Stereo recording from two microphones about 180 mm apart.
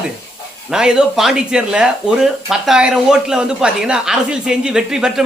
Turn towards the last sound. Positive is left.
turn(degrees=-5)  # may be behind; listen again after turning